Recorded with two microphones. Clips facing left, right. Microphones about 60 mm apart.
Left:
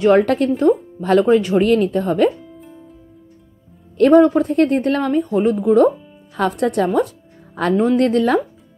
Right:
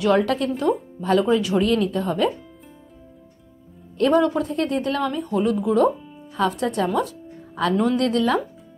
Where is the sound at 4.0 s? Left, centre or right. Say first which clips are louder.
Left 7 dB; left.